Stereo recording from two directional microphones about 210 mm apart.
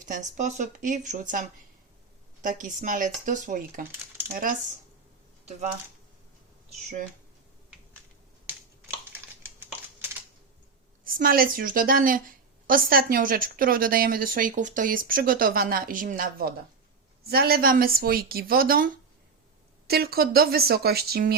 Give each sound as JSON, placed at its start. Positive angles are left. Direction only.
{"t": 0.0, "sound": "speech", "side_deg": -35}
{"t": 6.7, "sound": "speech", "side_deg": -35}
{"t": 10.0, "sound": "typing", "side_deg": -10}
{"t": 11.0, "sound": "a woman's voice", "side_deg": -45}
{"t": 19.9, "sound": "a woman's voice", "side_deg": -50}